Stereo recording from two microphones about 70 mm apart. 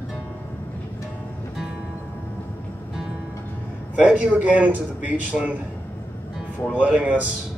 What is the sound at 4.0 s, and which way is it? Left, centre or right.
Speech, right.